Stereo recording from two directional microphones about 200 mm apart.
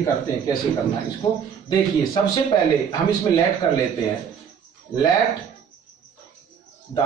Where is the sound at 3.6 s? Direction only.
25° left (ahead or behind).